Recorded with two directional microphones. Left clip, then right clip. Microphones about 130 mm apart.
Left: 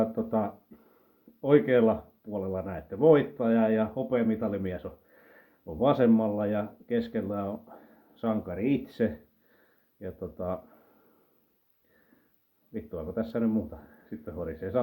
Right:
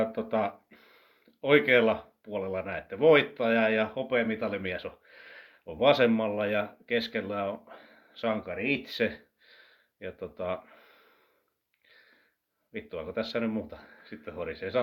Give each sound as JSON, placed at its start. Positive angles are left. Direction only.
{"t": 0.0, "sound": "speech", "side_deg": -15}
{"t": 8.6, "sound": "speech", "side_deg": -5}
{"t": 10.3, "sound": "a man's voice", "side_deg": -20}
{"t": 13.1, "sound": "speech", "side_deg": -15}
{"t": 14.3, "sound": "a man's voice", "side_deg": -30}